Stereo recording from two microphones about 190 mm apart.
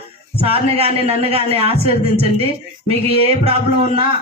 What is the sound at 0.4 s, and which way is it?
A man's voice, 30° right (ahead or behind).